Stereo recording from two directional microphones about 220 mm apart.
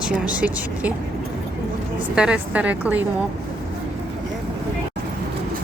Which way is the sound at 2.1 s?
5° right (ahead or behind).